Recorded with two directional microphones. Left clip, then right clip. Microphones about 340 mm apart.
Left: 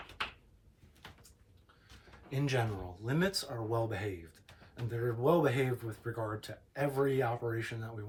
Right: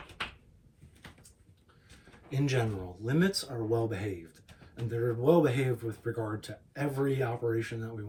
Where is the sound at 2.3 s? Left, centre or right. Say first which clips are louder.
Right 3 dB; centre.